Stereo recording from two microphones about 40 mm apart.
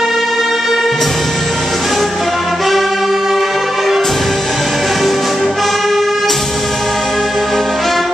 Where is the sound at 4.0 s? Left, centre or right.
Centre.